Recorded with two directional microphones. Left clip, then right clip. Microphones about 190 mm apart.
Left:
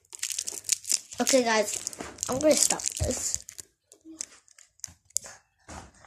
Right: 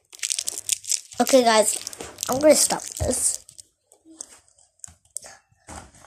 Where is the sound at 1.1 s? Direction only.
15° right (ahead or behind).